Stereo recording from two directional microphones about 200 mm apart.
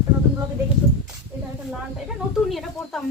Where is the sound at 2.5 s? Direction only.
Centre (ahead or behind).